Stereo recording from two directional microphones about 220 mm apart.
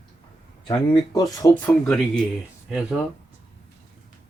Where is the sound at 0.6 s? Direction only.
20° left (ahead or behind); by 2.2 s 5° left (ahead or behind).